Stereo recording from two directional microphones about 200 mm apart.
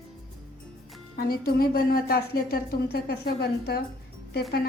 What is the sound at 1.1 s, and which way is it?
A woman's voice, 50° left (ahead or behind).